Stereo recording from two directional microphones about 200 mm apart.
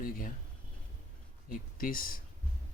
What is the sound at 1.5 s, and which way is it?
Speech, 45° left (ahead or behind).